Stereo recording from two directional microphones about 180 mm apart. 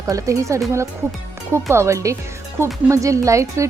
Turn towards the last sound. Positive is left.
turn(degrees=-15)  # may be behind; listen again after turning